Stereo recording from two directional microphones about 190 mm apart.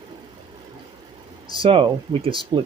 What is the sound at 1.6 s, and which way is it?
Speech, 25° right (ahead or behind).